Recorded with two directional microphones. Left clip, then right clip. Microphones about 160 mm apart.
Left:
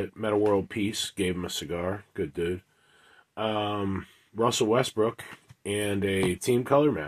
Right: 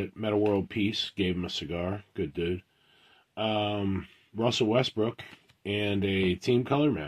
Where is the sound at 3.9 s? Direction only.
55° right (ahead or behind).